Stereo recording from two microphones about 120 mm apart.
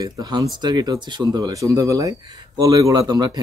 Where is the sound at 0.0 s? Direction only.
35° right (ahead or behind).